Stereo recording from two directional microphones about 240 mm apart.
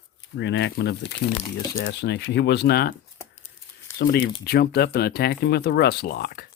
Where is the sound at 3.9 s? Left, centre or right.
Left.